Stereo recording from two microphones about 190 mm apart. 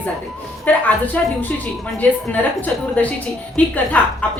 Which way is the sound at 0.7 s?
10° left (ahead or behind).